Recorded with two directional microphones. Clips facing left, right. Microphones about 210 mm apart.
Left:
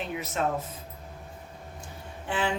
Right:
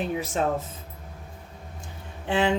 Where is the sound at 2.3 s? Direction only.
25° right (ahead or behind).